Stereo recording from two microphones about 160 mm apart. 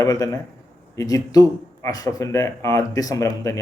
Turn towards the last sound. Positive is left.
turn(degrees=20)  # may be behind; listen again after turning